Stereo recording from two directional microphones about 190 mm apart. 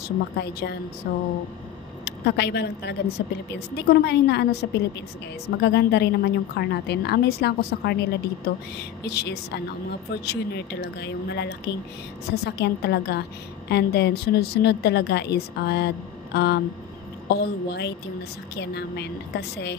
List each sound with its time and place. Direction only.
0.4 s speech: 60° left (ahead or behind)